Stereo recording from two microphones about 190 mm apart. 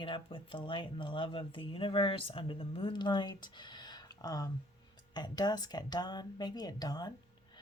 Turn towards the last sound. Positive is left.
turn(degrees=20)  # may be behind; listen again after turning